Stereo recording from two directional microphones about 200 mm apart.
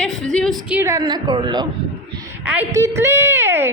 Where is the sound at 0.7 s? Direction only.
15° right (ahead or behind).